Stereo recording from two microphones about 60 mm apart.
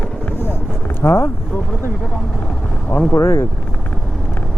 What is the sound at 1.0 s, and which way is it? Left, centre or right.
Speech, left.